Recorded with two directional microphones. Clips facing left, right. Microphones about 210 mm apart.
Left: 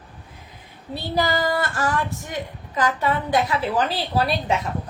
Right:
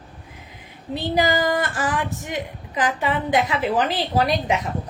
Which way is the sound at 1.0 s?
15° right (ahead or behind).